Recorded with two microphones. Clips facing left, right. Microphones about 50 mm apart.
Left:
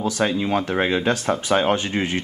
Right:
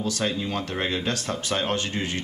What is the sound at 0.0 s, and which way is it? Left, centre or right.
Speech, centre.